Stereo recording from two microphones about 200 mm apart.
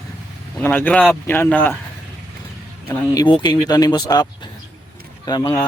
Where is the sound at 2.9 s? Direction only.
20° left (ahead or behind).